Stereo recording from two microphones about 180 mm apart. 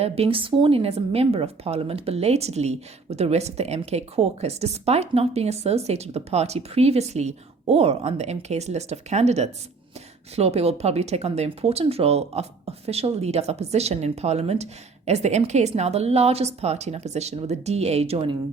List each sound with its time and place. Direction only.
0.0 s a woman's voice: 30° right (ahead or behind)